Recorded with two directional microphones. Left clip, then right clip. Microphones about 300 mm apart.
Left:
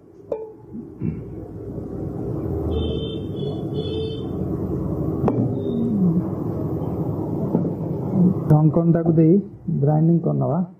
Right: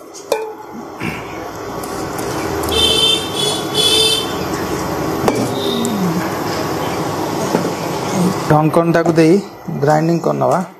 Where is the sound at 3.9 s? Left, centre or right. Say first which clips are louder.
Right 14 dB; centre.